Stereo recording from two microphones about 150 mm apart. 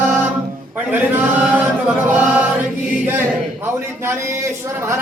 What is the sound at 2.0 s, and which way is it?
Choir, 10° right (ahead or behind).